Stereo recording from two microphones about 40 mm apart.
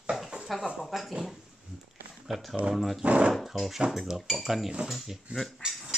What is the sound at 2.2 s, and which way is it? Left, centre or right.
Speech, centre.